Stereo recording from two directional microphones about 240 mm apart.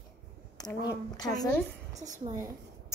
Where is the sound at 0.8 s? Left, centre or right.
Centre.